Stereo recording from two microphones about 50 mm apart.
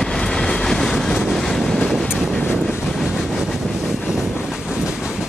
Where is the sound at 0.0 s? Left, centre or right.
Centre.